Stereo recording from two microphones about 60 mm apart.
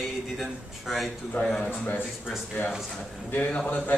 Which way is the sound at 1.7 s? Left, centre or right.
Left.